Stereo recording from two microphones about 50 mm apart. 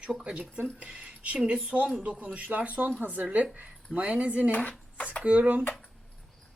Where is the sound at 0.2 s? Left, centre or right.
Right.